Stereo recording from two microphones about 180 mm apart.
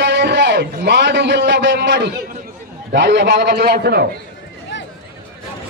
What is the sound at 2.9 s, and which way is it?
A man's voice, 75° right (ahead or behind).